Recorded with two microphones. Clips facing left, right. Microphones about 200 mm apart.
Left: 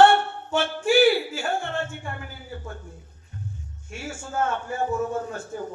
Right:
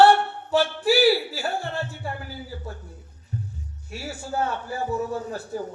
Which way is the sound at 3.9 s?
35° right (ahead or behind).